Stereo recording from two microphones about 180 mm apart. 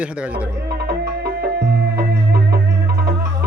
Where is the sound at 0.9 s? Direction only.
65° right (ahead or behind).